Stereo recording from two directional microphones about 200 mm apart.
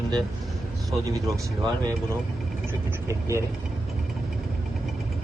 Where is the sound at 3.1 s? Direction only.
15° right (ahead or behind).